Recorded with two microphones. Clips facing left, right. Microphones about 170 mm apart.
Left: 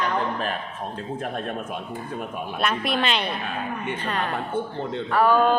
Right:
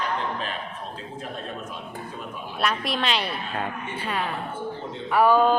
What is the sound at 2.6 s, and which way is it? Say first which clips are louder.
A woman's voice: left 2 dB; centre (ahead or behind).